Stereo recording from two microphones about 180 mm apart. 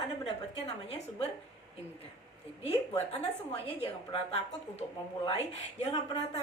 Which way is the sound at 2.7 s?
35° left (ahead or behind).